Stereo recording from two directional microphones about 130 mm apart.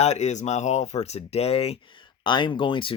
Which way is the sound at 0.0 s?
60° left (ahead or behind).